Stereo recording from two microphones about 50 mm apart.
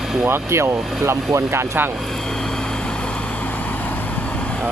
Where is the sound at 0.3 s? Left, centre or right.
Right.